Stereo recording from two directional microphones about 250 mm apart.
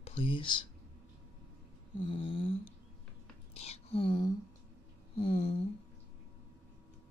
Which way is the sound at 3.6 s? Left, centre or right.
Left.